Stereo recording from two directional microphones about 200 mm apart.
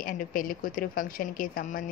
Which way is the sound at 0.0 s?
45° left (ahead or behind).